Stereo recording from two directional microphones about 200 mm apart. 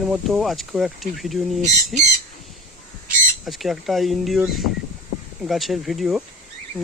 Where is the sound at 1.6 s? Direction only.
35° right (ahead or behind).